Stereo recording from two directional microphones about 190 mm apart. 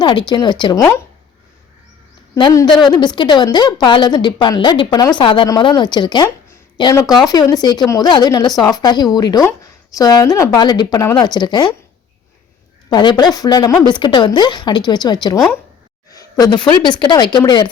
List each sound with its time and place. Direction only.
0.0 s a woman's voice: 25° left (ahead or behind)
2.3 s a woman's voice: 15° left (ahead or behind)
12.9 s a woman's voice: 20° left (ahead or behind)